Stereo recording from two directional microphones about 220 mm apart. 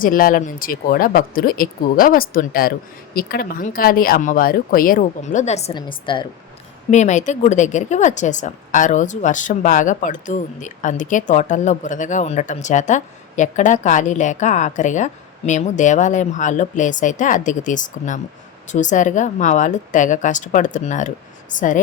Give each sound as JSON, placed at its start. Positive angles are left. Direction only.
{"t": 0.0, "sound": "a woman's voice", "side_deg": 40}
{"t": 6.9, "sound": "a woman's voice", "side_deg": 35}